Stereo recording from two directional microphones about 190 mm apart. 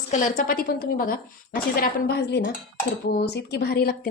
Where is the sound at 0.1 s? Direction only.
45° left (ahead or behind).